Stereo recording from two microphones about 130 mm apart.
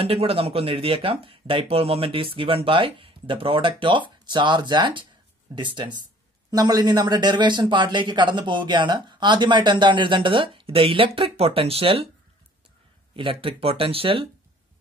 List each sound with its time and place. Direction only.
0.0 s speech: 50° right (ahead or behind)
13.1 s speech: 45° right (ahead or behind)